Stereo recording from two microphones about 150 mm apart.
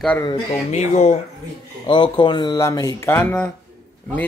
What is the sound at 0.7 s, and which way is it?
Speech, 50° left (ahead or behind).